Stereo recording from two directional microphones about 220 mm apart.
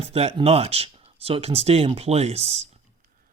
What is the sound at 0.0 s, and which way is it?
Speech, 25° right (ahead or behind).